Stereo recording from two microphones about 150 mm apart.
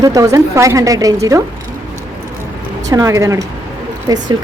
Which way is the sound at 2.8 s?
20° right (ahead or behind).